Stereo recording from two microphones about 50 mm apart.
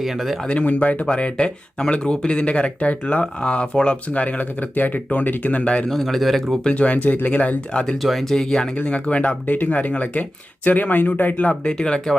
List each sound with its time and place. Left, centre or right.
0.0 s speech: centre
0.4 s speech: left
5.9 s speech: centre
6.7 s speech: left
8.0 s speech: centre
8.8 s speech: left
9.5 s speech: left